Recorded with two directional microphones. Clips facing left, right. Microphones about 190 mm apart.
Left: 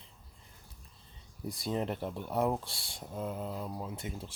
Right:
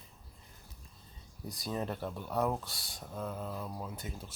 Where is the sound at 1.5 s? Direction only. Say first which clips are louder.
Left 3 dB; 25° left (ahead or behind).